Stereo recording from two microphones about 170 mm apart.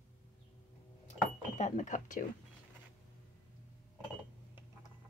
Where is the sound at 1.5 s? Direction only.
45° left (ahead or behind).